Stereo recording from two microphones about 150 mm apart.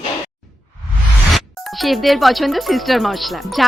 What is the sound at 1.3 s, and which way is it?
Speech, centre (ahead or behind).